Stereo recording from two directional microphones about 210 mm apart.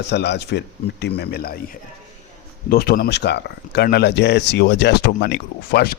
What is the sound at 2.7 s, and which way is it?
Speech, 45° left (ahead or behind).